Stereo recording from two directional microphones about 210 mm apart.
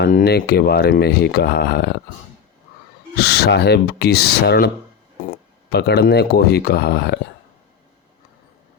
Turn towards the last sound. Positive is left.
turn(degrees=50)  # may be behind; listen again after turning